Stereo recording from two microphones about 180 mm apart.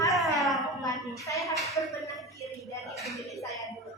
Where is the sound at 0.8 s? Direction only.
15° left (ahead or behind).